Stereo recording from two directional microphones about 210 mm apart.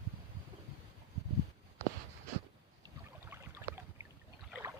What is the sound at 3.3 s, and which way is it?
Boat, 10° right (ahead or behind).